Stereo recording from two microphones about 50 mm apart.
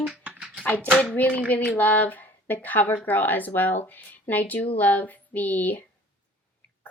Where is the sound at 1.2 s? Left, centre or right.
Left.